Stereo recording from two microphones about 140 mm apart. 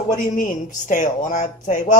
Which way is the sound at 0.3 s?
70° left (ahead or behind).